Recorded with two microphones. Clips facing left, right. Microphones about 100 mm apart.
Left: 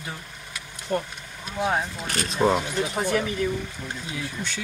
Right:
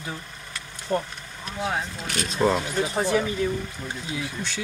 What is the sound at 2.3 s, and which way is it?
Speech, 5° left (ahead or behind).